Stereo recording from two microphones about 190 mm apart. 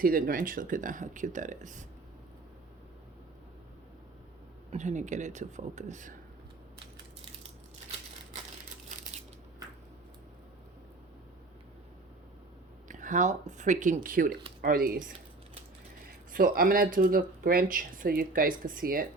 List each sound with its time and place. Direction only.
0.0 s speech: 45° right (ahead or behind)
4.7 s speech: 40° right (ahead or behind)
12.9 s speech: 40° right (ahead or behind)